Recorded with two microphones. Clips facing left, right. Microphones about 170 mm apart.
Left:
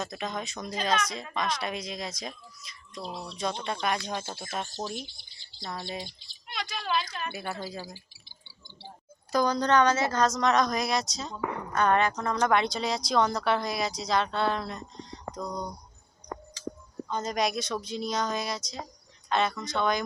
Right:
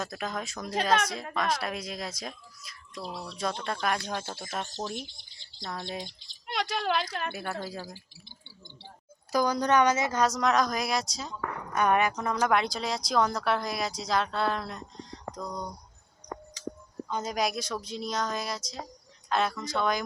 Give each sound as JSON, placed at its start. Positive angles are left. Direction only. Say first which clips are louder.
{"t": 0.0, "sound": "speech", "louder": "even", "side_deg": -5}
{"t": 3.0, "sound": "speech", "louder": "even", "side_deg": 25}
{"t": 3.3, "sound": "speech", "louder": "even", "side_deg": 0}
{"t": 6.5, "sound": "a woman's voice", "louder": "right 3 dB", "side_deg": -70}
{"t": 7.3, "sound": "speech", "louder": "even", "side_deg": 5}
{"t": 9.3, "sound": "a woman's voice", "louder": "left 1 dB", "side_deg": -10}
{"t": 17.1, "sound": "speech", "louder": "left 1 dB", "side_deg": -5}